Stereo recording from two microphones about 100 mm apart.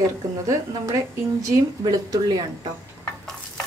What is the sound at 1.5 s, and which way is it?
Speech, 40° right (ahead or behind).